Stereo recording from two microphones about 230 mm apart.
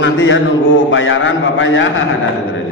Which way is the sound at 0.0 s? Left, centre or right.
Left.